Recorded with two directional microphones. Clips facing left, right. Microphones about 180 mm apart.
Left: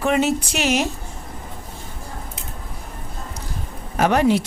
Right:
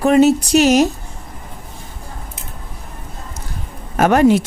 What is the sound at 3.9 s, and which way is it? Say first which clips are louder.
Speech: right 5 dB; 50° right (ahead or behind).